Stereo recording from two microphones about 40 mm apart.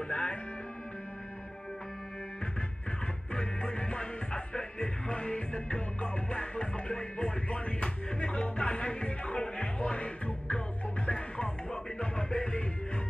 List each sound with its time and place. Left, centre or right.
0.1 s music: left
3.3 s music: left